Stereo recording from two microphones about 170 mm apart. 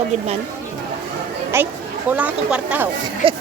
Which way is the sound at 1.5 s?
15° right (ahead or behind).